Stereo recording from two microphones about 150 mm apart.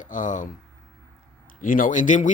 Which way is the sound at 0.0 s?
60° left (ahead or behind).